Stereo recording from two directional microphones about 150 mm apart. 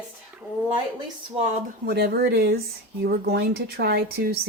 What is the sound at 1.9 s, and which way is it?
Speech, 90° right.